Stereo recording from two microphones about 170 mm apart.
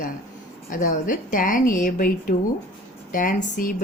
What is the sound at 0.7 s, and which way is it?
Speech, 50° left (ahead or behind).